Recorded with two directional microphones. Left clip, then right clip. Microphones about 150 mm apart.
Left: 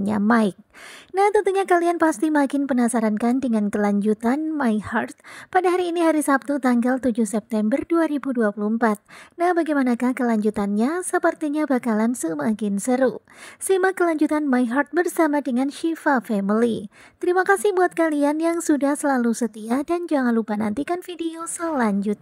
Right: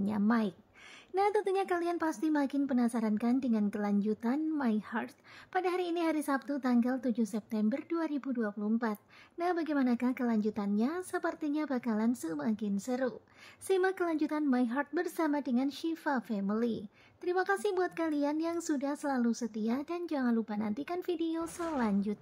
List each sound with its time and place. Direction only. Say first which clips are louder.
0.3 s speech: left 16 dB; 50° left (ahead or behind)